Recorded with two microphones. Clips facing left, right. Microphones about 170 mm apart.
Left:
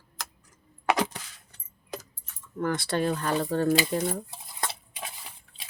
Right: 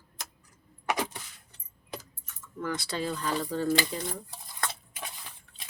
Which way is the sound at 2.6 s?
55° left (ahead or behind).